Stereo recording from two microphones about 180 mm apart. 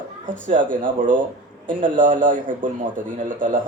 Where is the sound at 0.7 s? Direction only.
50° right (ahead or behind).